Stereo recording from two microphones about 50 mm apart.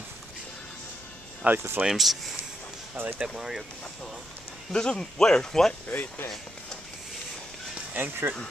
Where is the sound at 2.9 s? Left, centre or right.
Right.